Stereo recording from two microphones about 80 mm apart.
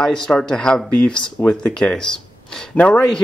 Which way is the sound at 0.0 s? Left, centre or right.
Centre.